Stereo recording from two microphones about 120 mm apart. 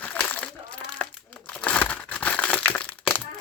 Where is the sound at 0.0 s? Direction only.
10° left (ahead or behind).